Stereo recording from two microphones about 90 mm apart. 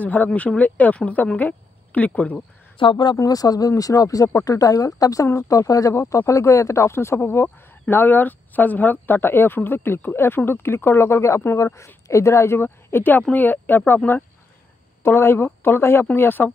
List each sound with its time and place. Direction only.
0.0 s speech: 20° left (ahead or behind)
2.8 s speech: 60° left (ahead or behind)
3.2 s speech: 45° left (ahead or behind); by 16.5 s 20° left (ahead or behind)